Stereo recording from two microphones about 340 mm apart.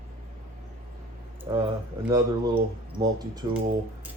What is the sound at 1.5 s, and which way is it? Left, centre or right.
Speech, centre.